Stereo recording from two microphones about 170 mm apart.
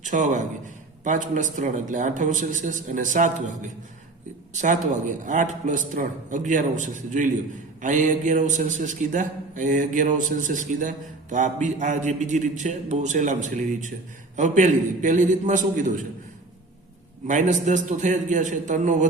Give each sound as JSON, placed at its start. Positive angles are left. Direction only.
{"t": 0.0, "sound": "a man's voice", "side_deg": -50}
{"t": 4.5, "sound": "a man's voice", "side_deg": -45}
{"t": 17.2, "sound": "a man's voice", "side_deg": -45}